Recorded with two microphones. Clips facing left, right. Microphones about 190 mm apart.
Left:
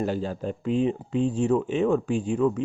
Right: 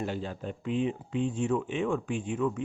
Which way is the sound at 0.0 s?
40° left (ahead or behind).